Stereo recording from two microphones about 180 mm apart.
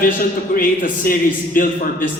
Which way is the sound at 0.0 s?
50° left (ahead or behind).